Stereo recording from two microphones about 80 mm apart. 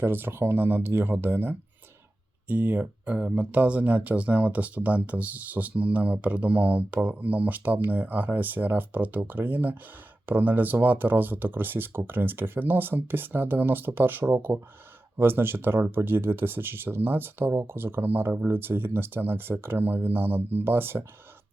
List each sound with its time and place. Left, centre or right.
0.0 s speech: right